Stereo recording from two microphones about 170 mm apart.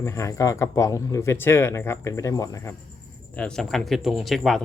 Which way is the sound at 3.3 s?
5° left (ahead or behind).